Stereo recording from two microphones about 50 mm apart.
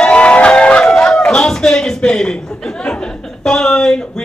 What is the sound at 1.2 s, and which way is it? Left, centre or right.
Speech, centre.